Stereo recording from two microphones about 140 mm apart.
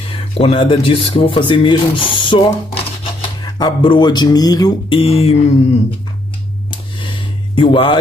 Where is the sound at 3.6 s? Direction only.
35° left (ahead or behind).